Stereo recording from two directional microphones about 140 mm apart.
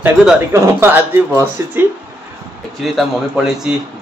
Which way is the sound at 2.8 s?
Centre (ahead or behind).